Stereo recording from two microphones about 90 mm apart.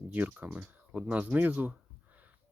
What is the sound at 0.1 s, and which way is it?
Speech, 15° right (ahead or behind).